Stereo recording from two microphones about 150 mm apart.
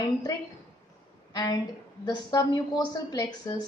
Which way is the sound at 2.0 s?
25° left (ahead or behind).